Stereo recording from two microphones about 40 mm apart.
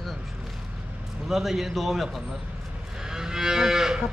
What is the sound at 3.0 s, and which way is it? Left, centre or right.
Moo, centre.